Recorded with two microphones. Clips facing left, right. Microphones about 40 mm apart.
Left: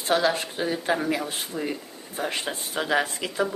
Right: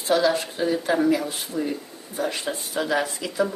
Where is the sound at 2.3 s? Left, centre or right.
Left.